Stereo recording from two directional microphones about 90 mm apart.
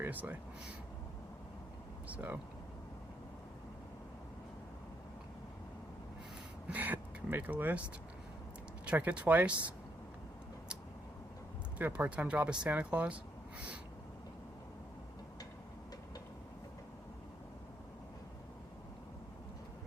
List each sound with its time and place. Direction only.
0.0 s speech: 20° right (ahead or behind)
2.0 s speech: 15° right (ahead or behind)
6.7 s speech: 20° right (ahead or behind)
8.9 s speech: 15° right (ahead or behind)
11.8 s speech: 20° right (ahead or behind)